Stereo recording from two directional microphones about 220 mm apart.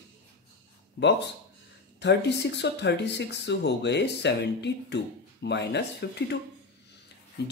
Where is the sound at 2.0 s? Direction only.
50° left (ahead or behind).